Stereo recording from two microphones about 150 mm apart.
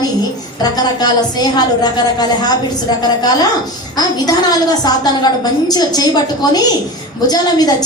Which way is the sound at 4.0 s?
25° left (ahead or behind).